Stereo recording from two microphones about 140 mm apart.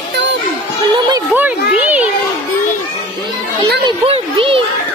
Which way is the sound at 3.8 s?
40° right (ahead or behind).